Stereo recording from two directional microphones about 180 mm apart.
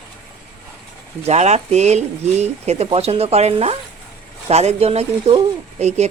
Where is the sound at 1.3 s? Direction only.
40° right (ahead or behind).